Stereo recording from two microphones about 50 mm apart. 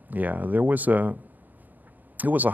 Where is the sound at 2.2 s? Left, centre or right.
Right.